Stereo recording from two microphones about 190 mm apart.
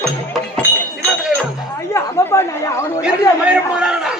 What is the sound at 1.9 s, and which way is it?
Chatter, 15° left (ahead or behind).